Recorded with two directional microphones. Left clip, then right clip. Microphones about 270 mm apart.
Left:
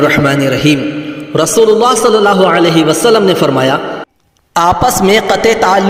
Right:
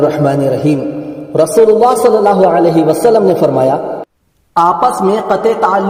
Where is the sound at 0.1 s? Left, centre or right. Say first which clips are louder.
Left 2 dB; centre.